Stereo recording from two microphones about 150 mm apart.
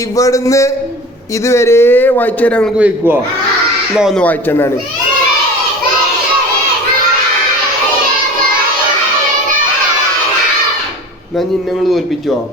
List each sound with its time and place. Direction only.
0.2 s a man's voice: 20° left (ahead or behind)
2.7 s speech: 10° right (ahead or behind)
4.2 s a man's voice: 10° left (ahead or behind)